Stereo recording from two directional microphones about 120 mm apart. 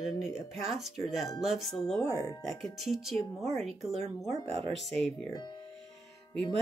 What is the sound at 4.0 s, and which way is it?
Speech, 60° right (ahead or behind).